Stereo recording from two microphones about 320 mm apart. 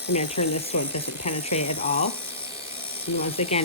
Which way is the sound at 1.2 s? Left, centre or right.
Centre.